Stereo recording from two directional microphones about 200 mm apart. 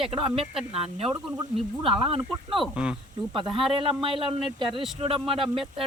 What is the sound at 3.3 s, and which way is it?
A woman's voice, 25° right (ahead or behind).